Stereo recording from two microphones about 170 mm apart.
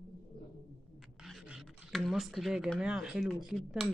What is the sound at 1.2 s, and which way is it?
Speech, centre (ahead or behind).